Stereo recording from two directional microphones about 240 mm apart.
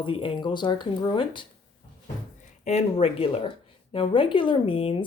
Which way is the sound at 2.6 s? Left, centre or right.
Left.